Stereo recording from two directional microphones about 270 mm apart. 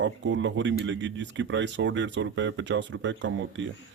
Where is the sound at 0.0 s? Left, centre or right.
Right.